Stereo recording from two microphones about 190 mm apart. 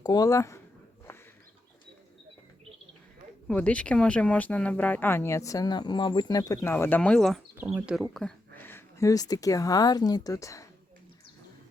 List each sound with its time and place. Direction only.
0.0 s speech: 20° left (ahead or behind)
1.1 s a sound: 10° left (ahead or behind)
3.4 s speech: 5° left (ahead or behind)
8.1 s speech: 10° left (ahead or behind)